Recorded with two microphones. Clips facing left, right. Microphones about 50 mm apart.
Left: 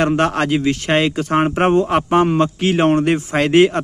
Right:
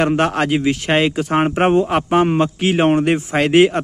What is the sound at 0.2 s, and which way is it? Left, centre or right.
Speech, centre.